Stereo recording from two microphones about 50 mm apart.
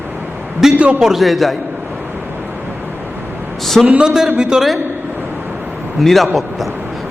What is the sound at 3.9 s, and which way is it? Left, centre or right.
Speech, right.